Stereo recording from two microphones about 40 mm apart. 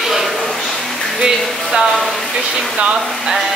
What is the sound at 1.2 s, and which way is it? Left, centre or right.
Speech, centre.